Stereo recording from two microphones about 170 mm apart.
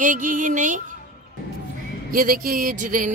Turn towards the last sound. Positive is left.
turn(degrees=-50)  # may be behind; listen again after turning